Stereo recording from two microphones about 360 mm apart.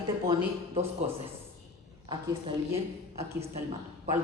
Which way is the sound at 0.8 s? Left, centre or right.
Centre.